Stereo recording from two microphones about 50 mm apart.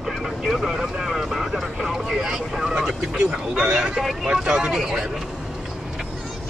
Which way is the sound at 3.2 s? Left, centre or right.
Centre.